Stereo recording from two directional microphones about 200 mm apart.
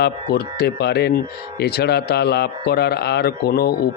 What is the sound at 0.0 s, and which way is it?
Speech, 55° left (ahead or behind).